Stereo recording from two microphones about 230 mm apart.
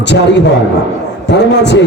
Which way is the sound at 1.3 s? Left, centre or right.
Left.